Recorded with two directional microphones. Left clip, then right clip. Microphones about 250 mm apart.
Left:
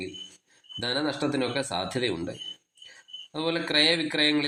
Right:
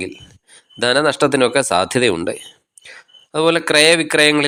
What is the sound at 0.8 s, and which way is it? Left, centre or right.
Speech, right.